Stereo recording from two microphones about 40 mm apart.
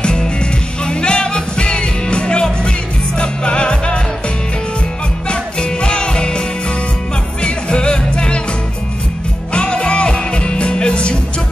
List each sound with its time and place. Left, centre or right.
0.0 s music: left
5.3 s music: left
7.4 s music: left
9.5 s music: left